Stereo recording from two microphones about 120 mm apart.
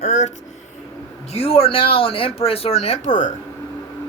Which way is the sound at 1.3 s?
55° left (ahead or behind).